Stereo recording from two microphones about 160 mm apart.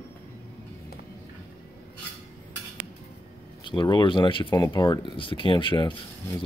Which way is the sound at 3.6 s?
30° left (ahead or behind).